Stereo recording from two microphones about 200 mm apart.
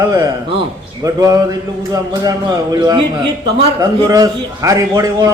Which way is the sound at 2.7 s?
20° right (ahead or behind).